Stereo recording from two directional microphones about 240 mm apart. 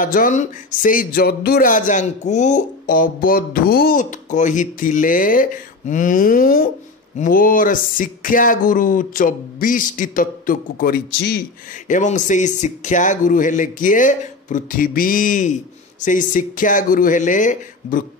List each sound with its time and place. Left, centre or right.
0.0 s speech: left